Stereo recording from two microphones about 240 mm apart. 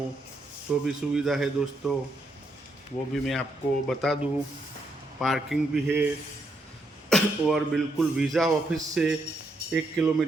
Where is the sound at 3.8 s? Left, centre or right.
Centre.